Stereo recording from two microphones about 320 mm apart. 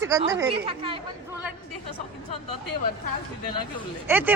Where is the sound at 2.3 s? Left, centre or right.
Left.